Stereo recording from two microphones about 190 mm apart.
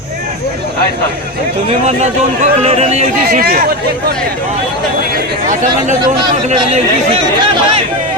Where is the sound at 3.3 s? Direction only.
50° right (ahead or behind).